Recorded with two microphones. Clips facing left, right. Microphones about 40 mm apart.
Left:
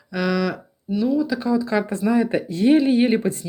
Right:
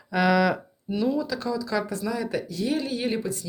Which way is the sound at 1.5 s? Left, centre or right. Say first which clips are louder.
Left 8 dB; left.